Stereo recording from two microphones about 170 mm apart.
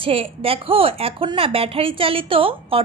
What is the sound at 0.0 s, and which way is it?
A woman's voice, 35° right (ahead or behind).